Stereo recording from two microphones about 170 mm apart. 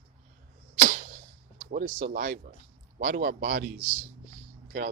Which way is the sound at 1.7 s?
55° right (ahead or behind).